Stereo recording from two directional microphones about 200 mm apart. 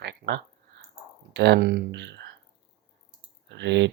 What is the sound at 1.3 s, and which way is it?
Speech, 55° right (ahead or behind).